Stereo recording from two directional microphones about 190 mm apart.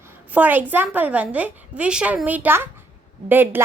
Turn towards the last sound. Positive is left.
turn(degrees=-10)  # may be behind; listen again after turning